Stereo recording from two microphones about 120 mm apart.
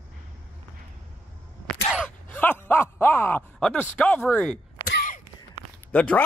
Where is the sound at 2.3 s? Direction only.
15° left (ahead or behind).